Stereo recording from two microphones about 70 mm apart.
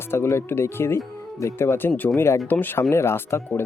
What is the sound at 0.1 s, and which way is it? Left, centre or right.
Speech, left.